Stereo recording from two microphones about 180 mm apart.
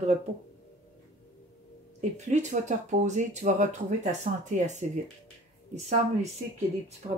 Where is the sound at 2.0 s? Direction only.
40° right (ahead or behind).